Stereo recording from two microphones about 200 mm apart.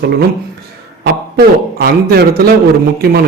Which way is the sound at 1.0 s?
50° right (ahead or behind).